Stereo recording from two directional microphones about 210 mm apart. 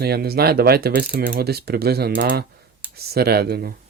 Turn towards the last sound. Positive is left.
turn(degrees=-50)  # may be behind; listen again after turning